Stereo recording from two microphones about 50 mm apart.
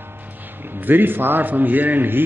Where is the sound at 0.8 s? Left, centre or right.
Right.